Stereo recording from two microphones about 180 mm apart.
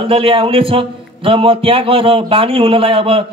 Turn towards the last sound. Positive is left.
turn(degrees=-30)  # may be behind; listen again after turning